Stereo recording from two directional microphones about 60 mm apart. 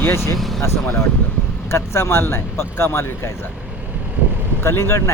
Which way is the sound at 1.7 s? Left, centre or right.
Left.